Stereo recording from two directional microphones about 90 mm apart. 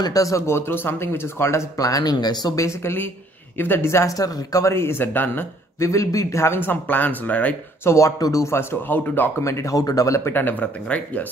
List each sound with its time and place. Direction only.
0.0 s speech: 40° left (ahead or behind); by 5.9 s 25° left (ahead or behind)
5.9 s speech: 35° left (ahead or behind); by 7.5 s 15° left (ahead or behind)
7.8 s speech: 35° left (ahead or behind)
9.4 s speech: 35° left (ahead or behind); by 11.2 s 15° left (ahead or behind)